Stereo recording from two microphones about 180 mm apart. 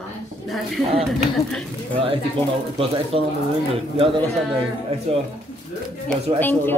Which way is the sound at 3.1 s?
35° right (ahead or behind).